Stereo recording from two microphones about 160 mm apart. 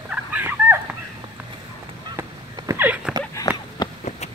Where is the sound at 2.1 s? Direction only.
20° right (ahead or behind).